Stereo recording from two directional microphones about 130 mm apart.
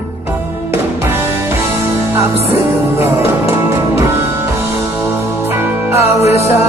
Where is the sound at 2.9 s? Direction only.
20° right (ahead or behind).